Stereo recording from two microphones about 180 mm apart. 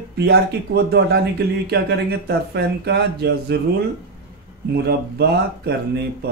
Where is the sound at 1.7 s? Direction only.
65° right (ahead or behind).